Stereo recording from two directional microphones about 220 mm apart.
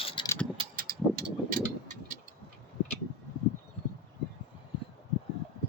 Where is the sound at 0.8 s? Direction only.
40° right (ahead or behind).